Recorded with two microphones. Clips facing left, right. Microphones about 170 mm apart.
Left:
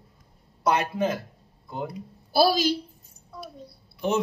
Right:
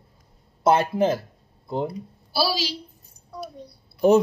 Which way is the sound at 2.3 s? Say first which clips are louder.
Left 5 dB; 50° left (ahead or behind).